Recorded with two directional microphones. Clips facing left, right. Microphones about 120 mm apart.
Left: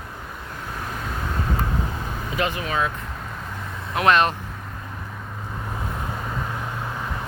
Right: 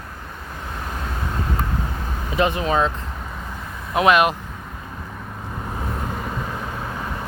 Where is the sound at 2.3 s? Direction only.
25° right (ahead or behind).